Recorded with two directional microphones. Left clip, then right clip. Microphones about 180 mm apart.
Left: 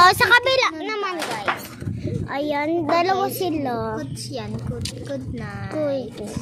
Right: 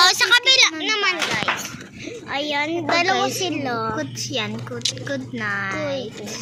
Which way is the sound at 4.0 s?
Centre (ahead or behind).